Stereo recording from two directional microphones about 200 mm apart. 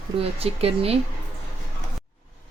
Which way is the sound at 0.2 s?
30° right (ahead or behind).